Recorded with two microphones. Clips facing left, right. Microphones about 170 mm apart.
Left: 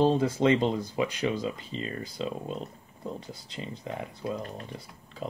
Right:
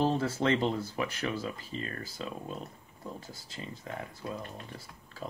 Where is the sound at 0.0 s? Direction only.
15° left (ahead or behind).